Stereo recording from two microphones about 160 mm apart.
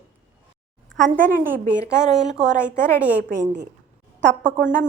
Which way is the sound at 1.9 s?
5° right (ahead or behind).